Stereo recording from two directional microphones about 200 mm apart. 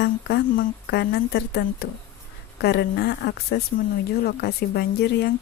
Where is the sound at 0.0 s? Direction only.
55° left (ahead or behind).